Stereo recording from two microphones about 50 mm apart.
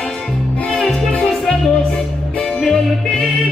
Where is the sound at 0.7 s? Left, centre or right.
Centre.